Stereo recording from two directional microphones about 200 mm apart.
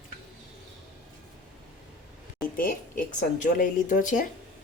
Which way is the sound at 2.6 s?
45° left (ahead or behind).